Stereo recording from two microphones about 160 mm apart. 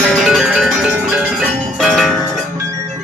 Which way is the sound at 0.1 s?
Centre (ahead or behind).